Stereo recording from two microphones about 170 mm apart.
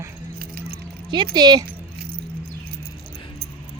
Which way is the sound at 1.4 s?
25° right (ahead or behind).